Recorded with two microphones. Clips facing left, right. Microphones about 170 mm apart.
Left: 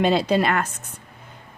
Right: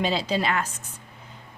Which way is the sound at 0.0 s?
55° left (ahead or behind).